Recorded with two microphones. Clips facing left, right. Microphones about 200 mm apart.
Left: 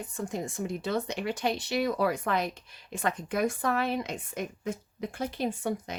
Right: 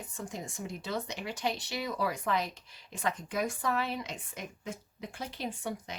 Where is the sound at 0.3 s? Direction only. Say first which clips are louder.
Left 8 dB; 55° left (ahead or behind).